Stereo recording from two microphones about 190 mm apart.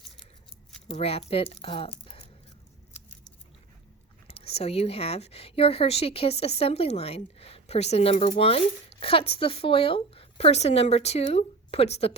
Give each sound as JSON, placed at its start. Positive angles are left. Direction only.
{"t": 0.9, "sound": "speech", "side_deg": 30}
{"t": 4.3, "sound": "speech", "side_deg": 30}